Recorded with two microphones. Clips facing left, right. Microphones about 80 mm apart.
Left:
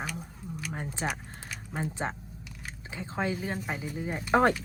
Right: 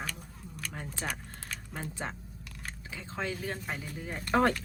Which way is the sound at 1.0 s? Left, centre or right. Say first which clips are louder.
Left 4 dB; left.